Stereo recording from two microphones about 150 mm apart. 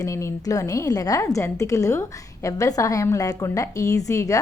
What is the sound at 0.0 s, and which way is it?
A woman's voice, 20° left (ahead or behind).